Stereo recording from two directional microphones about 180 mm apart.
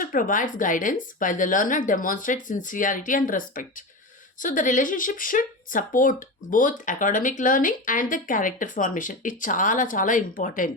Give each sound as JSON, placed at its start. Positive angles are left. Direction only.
{"t": 0.0, "sound": "speech", "side_deg": 50}